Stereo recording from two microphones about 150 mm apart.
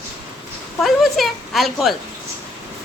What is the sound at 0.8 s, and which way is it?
A woman's voice, centre (ahead or behind).